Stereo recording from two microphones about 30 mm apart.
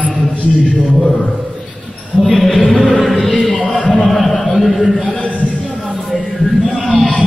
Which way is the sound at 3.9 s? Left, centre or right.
Centre.